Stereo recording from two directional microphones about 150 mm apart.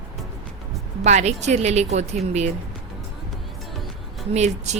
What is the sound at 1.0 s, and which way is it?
A woman's voice, 50° right (ahead or behind).